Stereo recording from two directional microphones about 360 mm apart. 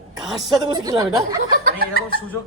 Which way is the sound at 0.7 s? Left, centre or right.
Centre.